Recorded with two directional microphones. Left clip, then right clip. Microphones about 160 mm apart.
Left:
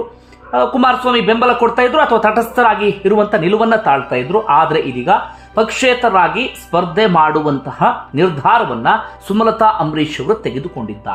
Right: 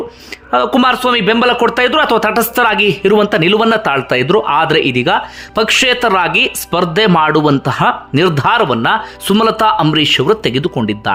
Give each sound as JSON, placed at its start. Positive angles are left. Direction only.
{"t": 0.5, "sound": "speech", "side_deg": -35}
{"t": 0.8, "sound": "speech", "side_deg": -20}
{"t": 4.1, "sound": "speech", "side_deg": -30}